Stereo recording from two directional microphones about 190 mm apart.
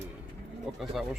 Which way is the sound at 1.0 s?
Centre (ahead or behind).